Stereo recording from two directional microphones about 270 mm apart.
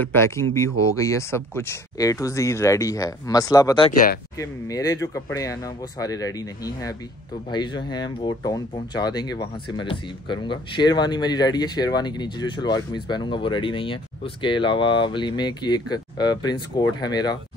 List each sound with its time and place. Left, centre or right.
0.0 s speech: centre